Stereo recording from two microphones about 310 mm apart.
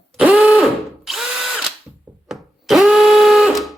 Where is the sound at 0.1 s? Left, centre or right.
Centre.